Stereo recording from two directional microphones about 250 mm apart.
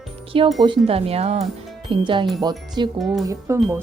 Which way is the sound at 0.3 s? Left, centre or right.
Right.